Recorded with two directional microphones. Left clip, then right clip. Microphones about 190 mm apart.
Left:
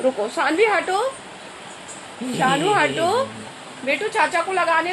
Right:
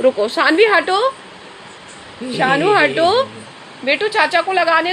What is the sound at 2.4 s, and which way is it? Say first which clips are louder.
A woman's voice: right 5 dB; 50° right (ahead or behind).